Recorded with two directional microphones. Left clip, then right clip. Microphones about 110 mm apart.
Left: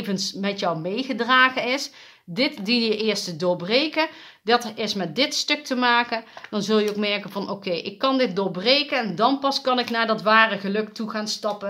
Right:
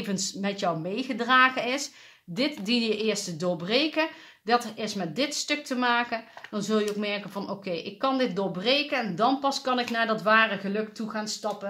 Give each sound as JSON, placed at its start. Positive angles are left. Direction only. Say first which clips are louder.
{"t": 0.0, "sound": "speech", "louder": "left 4 dB", "side_deg": 30}